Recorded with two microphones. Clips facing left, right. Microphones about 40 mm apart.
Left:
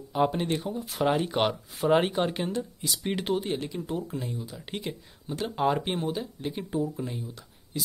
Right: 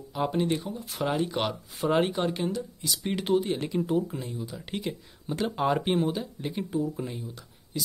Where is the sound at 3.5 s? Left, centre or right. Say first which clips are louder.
Right 5 dB; centre.